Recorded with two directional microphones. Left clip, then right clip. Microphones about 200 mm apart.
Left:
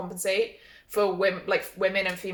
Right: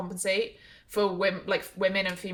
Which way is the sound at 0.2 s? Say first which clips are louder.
Left 2 dB; 20° right (ahead or behind).